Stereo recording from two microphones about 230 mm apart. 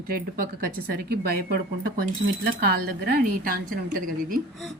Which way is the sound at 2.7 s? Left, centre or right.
Right.